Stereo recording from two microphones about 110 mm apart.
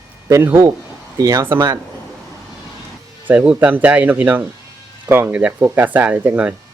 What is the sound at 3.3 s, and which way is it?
Speech, 10° right (ahead or behind).